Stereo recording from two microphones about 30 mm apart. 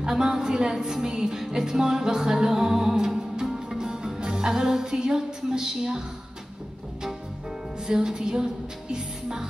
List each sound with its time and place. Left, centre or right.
0.1 s music: right
7.8 s music: centre